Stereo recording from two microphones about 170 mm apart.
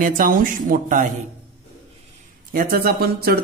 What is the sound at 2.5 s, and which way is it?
Speech, 60° right (ahead or behind).